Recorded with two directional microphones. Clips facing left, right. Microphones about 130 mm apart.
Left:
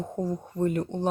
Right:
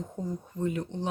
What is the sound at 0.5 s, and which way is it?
Speech, 50° left (ahead or behind).